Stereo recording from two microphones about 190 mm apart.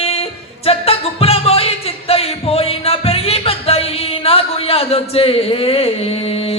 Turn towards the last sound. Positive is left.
turn(degrees=30)  # may be behind; listen again after turning